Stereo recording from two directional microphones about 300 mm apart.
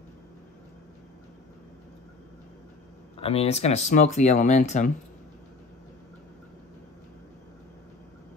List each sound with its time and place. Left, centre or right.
3.2 s speech: centre